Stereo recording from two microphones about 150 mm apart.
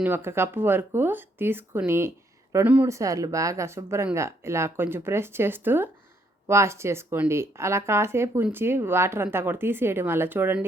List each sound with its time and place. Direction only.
0.0 s speech: 15° right (ahead or behind)